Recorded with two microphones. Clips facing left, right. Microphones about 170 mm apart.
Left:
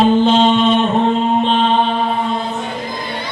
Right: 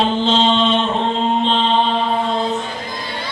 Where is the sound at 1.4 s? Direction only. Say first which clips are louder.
Left 3 dB; 50° left (ahead or behind).